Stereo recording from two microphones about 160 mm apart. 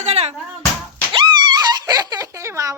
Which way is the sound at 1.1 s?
25° right (ahead or behind).